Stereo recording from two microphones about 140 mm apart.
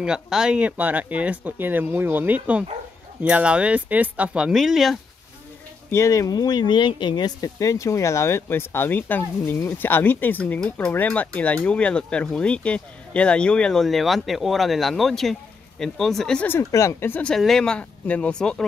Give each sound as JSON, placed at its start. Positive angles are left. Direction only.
{"t": 0.0, "sound": "speech", "side_deg": -5}
{"t": 5.9, "sound": "speech", "side_deg": 20}